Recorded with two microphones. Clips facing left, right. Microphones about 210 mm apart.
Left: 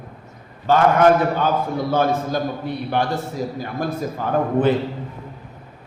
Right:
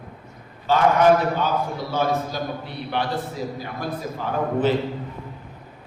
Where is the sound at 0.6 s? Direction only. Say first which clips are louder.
Left 2 dB; 50° left (ahead or behind).